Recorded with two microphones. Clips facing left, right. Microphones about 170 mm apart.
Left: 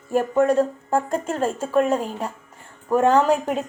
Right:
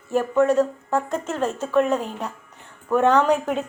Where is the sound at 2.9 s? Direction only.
30° left (ahead or behind).